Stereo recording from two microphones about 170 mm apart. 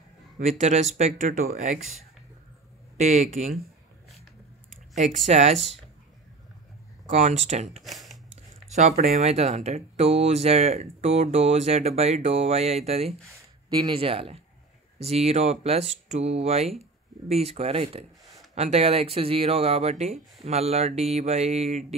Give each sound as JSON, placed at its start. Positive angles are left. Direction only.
{"t": 0.4, "sound": "speech", "side_deg": -40}
{"t": 3.0, "sound": "speech", "side_deg": -40}
{"t": 4.6, "sound": "speech", "side_deg": -45}
{"t": 7.1, "sound": "speech", "side_deg": -40}
{"t": 7.8, "sound": "a sound", "side_deg": 0}
{"t": 8.6, "sound": "speech", "side_deg": -40}